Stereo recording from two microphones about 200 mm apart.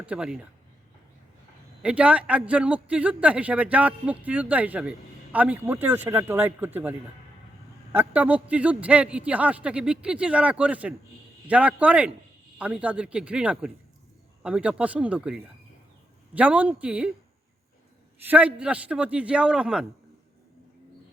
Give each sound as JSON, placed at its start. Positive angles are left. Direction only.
{"t": 0.0, "sound": "a man's voice", "side_deg": -5}
{"t": 1.8, "sound": "a man's voice", "side_deg": -5}
{"t": 7.9, "sound": "a man's voice", "side_deg": -10}
{"t": 18.2, "sound": "a man's voice", "side_deg": -10}